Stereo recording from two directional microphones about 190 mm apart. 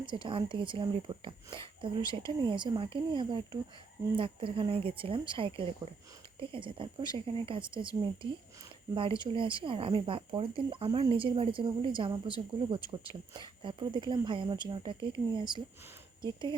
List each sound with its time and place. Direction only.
0.0 s speech: 25° right (ahead or behind)
9.0 s speech: 25° right (ahead or behind)